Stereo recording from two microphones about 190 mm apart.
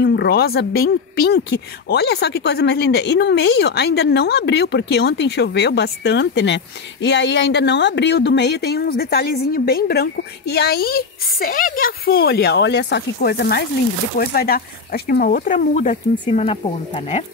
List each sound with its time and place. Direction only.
0.0 s speech: 60° left (ahead or behind); by 17.2 s 35° left (ahead or behind)